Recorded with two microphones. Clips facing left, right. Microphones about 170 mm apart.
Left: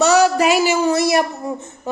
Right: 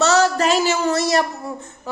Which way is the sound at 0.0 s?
10° left (ahead or behind).